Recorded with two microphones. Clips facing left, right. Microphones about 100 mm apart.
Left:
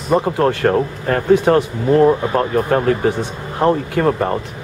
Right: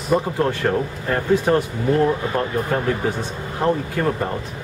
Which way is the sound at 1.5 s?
60° left (ahead or behind).